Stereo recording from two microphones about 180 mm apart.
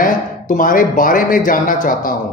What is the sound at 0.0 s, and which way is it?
A man's voice, 50° left (ahead or behind).